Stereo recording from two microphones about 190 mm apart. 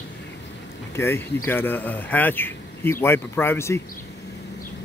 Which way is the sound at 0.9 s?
10° left (ahead or behind).